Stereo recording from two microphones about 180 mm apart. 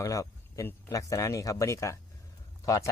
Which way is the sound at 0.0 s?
20° left (ahead or behind).